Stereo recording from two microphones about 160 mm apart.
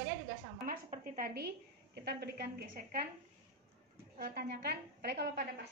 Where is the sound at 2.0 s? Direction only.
80° right; by 3.0 s 60° right (ahead or behind).